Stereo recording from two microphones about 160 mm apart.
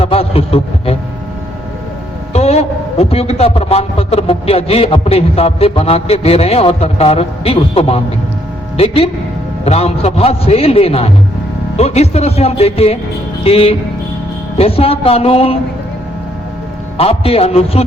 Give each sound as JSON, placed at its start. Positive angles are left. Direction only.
{"t": 0.0, "sound": "a man's voice", "side_deg": 35}
{"t": 2.3, "sound": "a man's voice", "side_deg": 40}
{"t": 17.0, "sound": "a man's voice", "side_deg": 40}